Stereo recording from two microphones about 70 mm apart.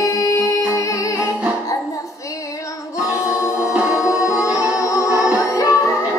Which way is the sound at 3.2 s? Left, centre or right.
Left.